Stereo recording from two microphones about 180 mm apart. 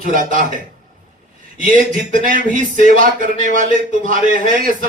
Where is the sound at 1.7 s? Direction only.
50° right (ahead or behind).